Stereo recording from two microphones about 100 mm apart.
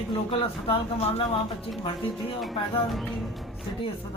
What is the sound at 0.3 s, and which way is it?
Speech, 85° left.